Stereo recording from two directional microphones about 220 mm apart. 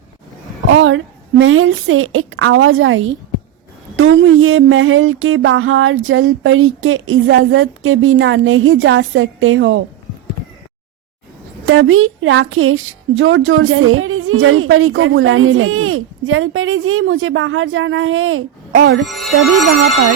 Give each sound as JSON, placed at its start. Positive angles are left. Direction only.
{"t": 0.7, "sound": "a sound", "side_deg": -60}
{"t": 11.6, "sound": "a woman's voice", "side_deg": -65}
{"t": 18.7, "sound": "music", "side_deg": -55}
{"t": 19.0, "sound": "music", "side_deg": 0}